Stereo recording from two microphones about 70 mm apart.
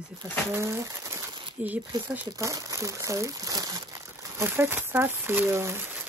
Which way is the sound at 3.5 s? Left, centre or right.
Right.